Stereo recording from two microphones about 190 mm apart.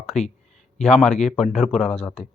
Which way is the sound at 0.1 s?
35° left (ahead or behind).